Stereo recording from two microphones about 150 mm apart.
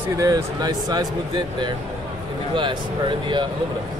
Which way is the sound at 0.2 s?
25° right (ahead or behind).